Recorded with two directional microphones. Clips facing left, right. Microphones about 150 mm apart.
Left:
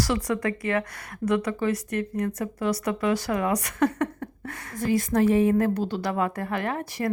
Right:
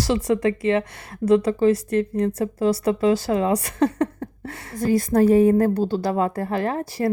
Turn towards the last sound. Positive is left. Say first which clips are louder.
# right 5 dB
turn(degrees=-30)  # may be behind; listen again after turning